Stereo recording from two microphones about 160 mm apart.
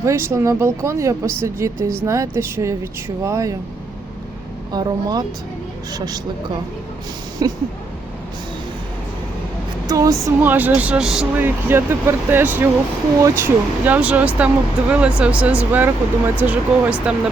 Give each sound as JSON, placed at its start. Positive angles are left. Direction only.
{"t": 0.0, "sound": "speech", "side_deg": -15}
{"t": 4.7, "sound": "speech", "side_deg": -25}
{"t": 7.4, "sound": "speech", "side_deg": -25}
{"t": 9.8, "sound": "speech", "side_deg": -20}